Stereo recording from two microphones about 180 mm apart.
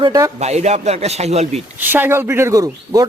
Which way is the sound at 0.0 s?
20° right (ahead or behind).